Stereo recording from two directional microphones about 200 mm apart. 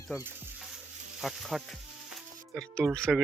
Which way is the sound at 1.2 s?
Centre (ahead or behind).